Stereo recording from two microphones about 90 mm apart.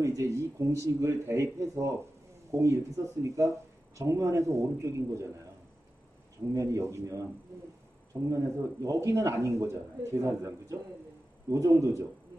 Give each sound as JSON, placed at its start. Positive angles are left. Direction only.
{"t": 0.0, "sound": "speech", "side_deg": -35}
{"t": 6.5, "sound": "speech", "side_deg": -35}